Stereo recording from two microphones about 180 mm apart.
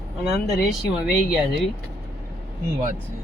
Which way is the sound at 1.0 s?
Centre (ahead or behind).